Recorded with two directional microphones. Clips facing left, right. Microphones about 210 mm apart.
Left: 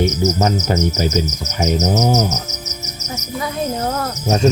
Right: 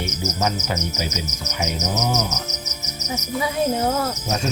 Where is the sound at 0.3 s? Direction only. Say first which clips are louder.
Left 7 dB; 45° left (ahead or behind).